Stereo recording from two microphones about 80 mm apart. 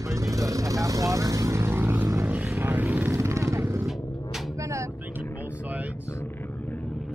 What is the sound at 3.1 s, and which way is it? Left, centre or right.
Vehicle, right.